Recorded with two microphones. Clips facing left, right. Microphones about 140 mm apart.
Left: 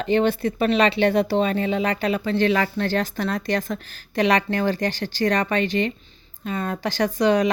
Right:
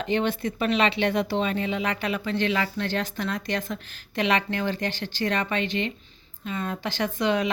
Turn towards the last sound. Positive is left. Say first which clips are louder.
# left 6 dB
turn(degrees=40)  # may be behind; listen again after turning